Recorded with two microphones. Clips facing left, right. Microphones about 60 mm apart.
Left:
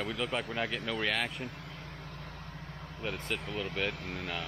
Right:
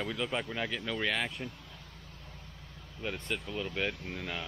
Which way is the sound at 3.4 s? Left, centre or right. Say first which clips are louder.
Even; left.